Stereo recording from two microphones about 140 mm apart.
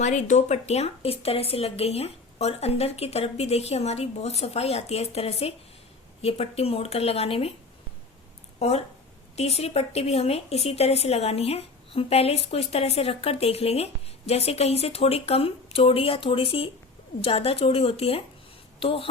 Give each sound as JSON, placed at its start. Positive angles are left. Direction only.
{"t": 0.0, "sound": "a woman's voice", "side_deg": 60}
{"t": 8.5, "sound": "a woman's voice", "side_deg": 50}